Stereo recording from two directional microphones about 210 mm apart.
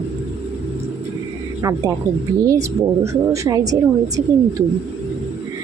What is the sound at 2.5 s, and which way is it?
A woman's voice, 15° right (ahead or behind).